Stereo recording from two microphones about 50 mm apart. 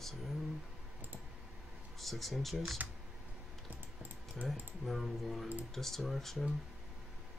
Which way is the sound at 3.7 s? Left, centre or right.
Right.